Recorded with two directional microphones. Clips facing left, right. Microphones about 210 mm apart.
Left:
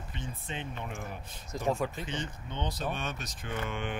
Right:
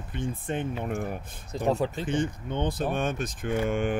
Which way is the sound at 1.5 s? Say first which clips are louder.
Right 5 dB; 30° right (ahead or behind).